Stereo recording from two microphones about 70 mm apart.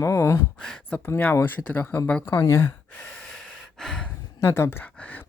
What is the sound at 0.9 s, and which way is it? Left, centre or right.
Speech, left.